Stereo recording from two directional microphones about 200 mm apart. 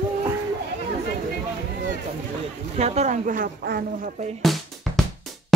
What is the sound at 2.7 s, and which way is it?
Speech, 35° right (ahead or behind).